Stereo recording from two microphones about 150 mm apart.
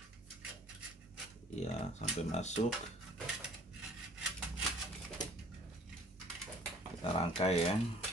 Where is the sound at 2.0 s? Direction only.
50° left (ahead or behind).